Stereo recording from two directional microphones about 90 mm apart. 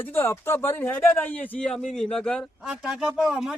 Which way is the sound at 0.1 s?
25° left (ahead or behind).